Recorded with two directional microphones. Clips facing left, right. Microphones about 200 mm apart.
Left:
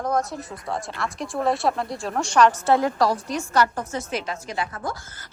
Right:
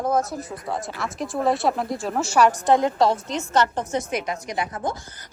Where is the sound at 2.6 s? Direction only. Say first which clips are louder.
Right 1 dB; 20° right (ahead or behind).